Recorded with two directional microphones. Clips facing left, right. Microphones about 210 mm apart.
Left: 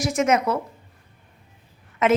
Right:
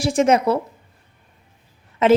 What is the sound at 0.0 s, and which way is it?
Speech, 30° right (ahead or behind).